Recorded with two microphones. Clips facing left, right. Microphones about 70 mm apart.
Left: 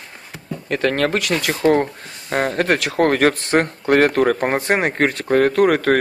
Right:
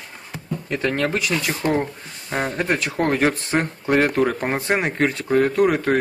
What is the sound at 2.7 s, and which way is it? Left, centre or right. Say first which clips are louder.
Speech: left 4 dB; left.